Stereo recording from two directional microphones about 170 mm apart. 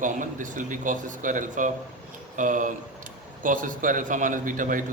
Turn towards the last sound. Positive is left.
turn(degrees=-50)  # may be behind; listen again after turning